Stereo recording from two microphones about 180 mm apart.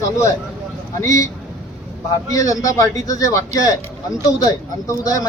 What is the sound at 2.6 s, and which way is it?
Speech, 20° left (ahead or behind).